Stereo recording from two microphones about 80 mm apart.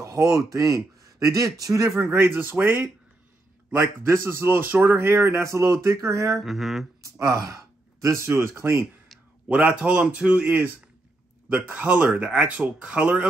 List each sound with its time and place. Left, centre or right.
0.0 s speech: right
2.0 s a man's voice: right
6.3 s mantra: centre
7.0 s speech: right
9.5 s speech: centre